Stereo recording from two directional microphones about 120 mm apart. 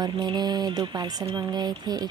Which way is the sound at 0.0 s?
35° right (ahead or behind).